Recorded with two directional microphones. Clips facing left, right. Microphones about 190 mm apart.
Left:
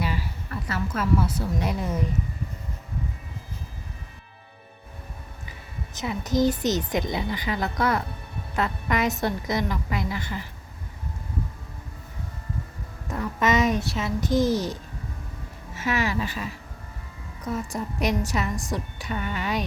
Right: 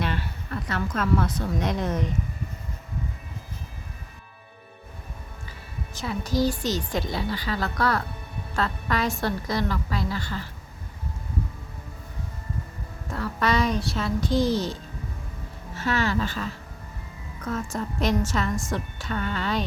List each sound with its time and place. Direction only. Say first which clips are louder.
0.0 s a sound: even; 5° left (ahead or behind)
0.7 s a woman's voice: even; 5° left (ahead or behind)
5.9 s a woman's voice: left 2 dB; 20° left (ahead or behind)
13.1 s speech: left 2 dB; 20° left (ahead or behind)
14.3 s a child's voice: left 1 dB; 45° left (ahead or behind)
15.7 s a woman's voice: right 1 dB; 15° left (ahead or behind)